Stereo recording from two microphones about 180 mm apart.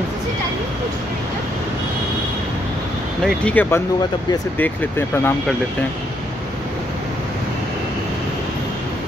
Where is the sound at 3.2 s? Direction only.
5° left (ahead or behind).